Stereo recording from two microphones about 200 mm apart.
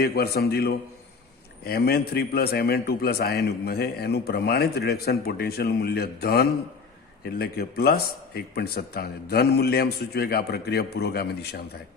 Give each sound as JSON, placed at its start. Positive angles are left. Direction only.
{"t": 0.0, "sound": "a man's voice", "side_deg": 50}